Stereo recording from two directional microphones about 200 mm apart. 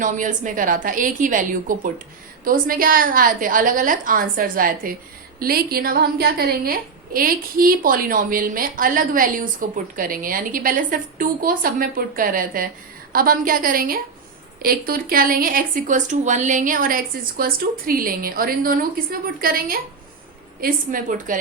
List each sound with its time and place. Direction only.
0.0 s a woman's voice: 40° right (ahead or behind)